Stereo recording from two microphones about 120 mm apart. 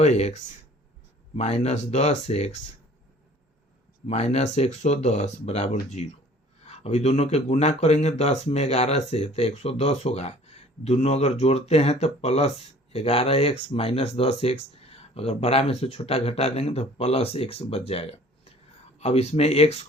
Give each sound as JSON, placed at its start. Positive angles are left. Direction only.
{"t": 0.0, "sound": "speech", "side_deg": 65}
{"t": 1.4, "sound": "speech", "side_deg": 65}
{"t": 4.0, "sound": "speech", "side_deg": 60}